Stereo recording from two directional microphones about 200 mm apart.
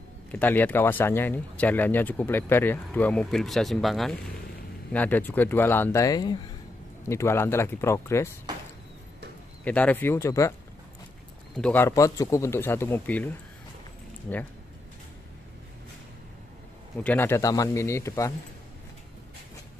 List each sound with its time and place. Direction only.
0.3 s speech: 10° left (ahead or behind)
9.7 s speech: 10° left (ahead or behind)
11.5 s speech: 5° left (ahead or behind)
17.0 s speech: 10° left (ahead or behind)